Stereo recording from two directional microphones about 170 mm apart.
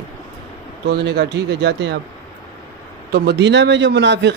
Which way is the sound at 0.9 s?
75° right (ahead or behind).